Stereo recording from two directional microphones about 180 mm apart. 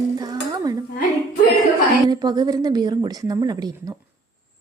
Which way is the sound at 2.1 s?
20° right (ahead or behind).